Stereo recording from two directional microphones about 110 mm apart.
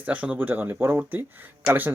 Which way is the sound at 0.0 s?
15° right (ahead or behind).